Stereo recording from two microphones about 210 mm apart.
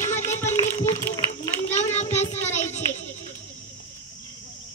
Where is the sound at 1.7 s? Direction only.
35° left (ahead or behind).